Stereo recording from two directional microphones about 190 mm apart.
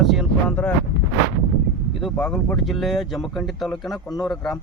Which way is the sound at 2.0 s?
Centre (ahead or behind).